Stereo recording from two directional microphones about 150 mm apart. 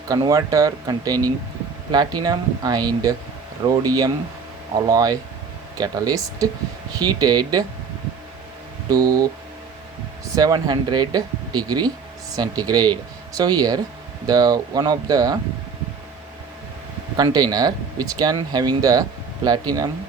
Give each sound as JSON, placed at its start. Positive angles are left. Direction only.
{"t": 0.1, "sound": "speech", "side_deg": -20}
{"t": 8.9, "sound": "speech", "side_deg": -25}
{"t": 10.3, "sound": "speech", "side_deg": -25}
{"t": 17.2, "sound": "speech", "side_deg": -25}